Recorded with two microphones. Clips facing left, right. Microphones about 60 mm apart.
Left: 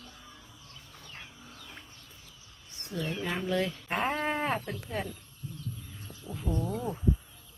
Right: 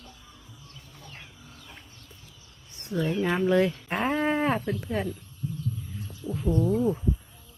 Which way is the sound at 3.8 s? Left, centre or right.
Centre.